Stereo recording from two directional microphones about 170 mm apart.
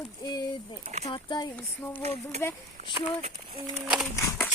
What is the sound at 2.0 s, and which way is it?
Speech, 40° right (ahead or behind).